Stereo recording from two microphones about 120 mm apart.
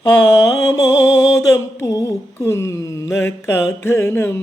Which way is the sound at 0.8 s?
25° left (ahead or behind).